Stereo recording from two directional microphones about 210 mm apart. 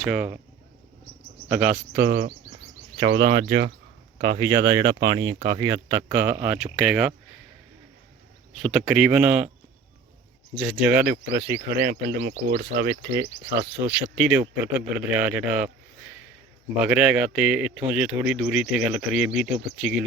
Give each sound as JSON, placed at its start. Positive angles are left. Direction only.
{"t": 0.0, "sound": "speech", "side_deg": -5}
{"t": 1.5, "sound": "speech", "side_deg": -10}
{"t": 2.0, "sound": "speech", "side_deg": -55}
{"t": 4.4, "sound": "speech", "side_deg": -15}
{"t": 8.5, "sound": "speech", "side_deg": 0}
{"t": 10.5, "sound": "speech", "side_deg": -5}
{"t": 11.8, "sound": "speech", "side_deg": -50}
{"t": 13.1, "sound": "speech", "side_deg": -10}
{"t": 16.8, "sound": "speech", "side_deg": -5}